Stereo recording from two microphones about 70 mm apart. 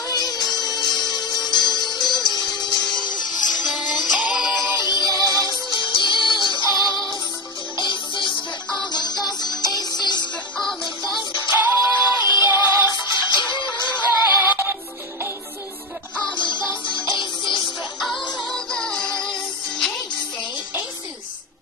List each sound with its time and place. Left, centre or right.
0.1 s music: left
4.2 s music: centre
5.0 s music: right
5.5 s music: left
11.5 s music: right
12.2 s music: left
12.4 s music: right
13.0 s music: left
13.9 s synthetic singing: right
16.3 s music: left
18.2 s music: centre